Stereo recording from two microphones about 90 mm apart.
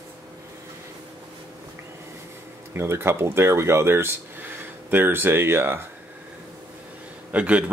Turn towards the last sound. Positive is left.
turn(degrees=-15)  # may be behind; listen again after turning